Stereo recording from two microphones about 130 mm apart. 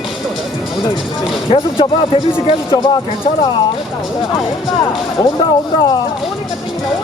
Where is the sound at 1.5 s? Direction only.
40° left (ahead or behind).